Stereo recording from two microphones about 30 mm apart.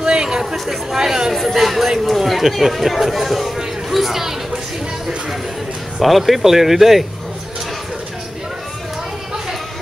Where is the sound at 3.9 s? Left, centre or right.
Centre.